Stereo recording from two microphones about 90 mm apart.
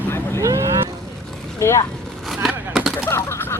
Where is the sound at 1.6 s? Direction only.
35° left (ahead or behind).